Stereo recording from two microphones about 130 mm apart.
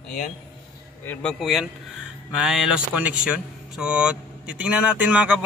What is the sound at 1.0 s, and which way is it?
Speech, 10° left (ahead or behind).